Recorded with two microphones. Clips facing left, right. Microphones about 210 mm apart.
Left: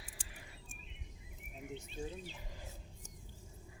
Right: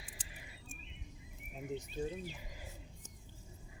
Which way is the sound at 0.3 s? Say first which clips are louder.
Even; 15° right (ahead or behind).